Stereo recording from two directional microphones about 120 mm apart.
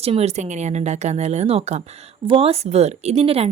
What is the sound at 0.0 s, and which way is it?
Speech, 60° right (ahead or behind).